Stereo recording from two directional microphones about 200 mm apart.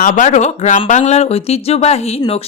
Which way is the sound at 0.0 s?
40° left (ahead or behind).